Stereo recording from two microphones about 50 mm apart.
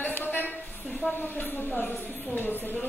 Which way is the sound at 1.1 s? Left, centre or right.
Left.